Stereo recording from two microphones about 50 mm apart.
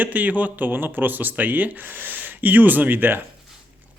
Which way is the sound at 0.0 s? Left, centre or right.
Right.